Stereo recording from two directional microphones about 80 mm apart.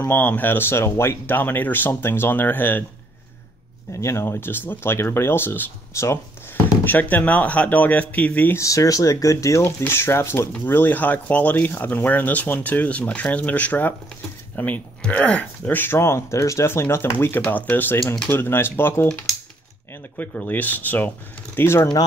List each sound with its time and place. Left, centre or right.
0.1 s speech: left
4.0 s speech: left
6.8 s speech: left
8.5 s speech: left
18.0 s speech: centre
18.3 s speech: left
20.2 s speech: left